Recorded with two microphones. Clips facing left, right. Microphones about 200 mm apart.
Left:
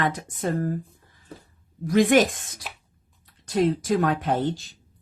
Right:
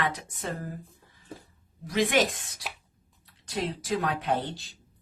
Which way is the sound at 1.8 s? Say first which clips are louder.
Left 7 dB; 45° left (ahead or behind).